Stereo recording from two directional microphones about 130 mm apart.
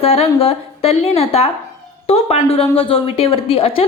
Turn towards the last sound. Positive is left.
turn(degrees=45)  # may be behind; listen again after turning